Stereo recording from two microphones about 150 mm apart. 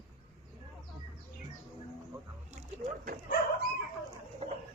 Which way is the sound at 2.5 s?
55° right (ahead or behind).